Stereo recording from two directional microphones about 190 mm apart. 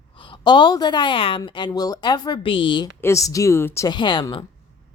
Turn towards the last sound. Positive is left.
turn(degrees=25)  # may be behind; listen again after turning